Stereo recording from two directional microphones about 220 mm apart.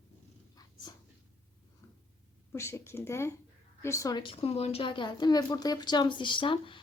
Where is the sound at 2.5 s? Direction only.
10° left (ahead or behind).